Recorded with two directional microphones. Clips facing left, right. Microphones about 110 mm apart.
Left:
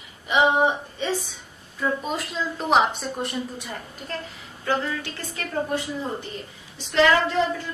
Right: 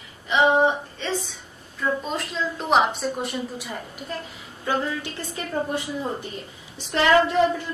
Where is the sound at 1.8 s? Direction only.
5° left (ahead or behind).